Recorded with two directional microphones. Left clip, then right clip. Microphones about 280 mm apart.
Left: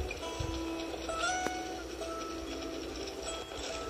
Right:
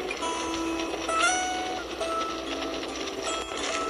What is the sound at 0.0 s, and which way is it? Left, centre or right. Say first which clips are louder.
Music: right 9 dB; right.